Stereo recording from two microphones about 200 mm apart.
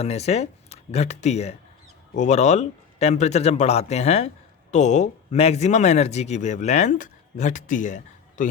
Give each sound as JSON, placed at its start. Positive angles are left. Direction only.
{"t": 0.0, "sound": "speech", "side_deg": 30}